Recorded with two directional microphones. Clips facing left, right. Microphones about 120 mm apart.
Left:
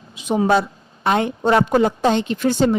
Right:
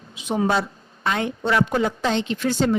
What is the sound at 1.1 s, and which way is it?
Speech, 45° left (ahead or behind).